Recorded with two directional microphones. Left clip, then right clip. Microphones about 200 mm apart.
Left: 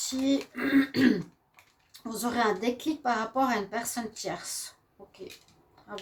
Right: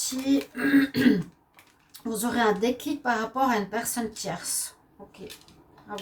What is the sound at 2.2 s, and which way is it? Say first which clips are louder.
A woman's voice: right 3 dB; 40° left (ahead or behind).